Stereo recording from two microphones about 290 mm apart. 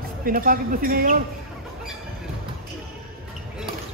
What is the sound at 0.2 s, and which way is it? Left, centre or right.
A man's voice, right.